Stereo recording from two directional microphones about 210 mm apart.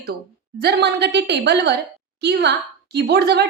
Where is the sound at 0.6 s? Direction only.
50° right (ahead or behind).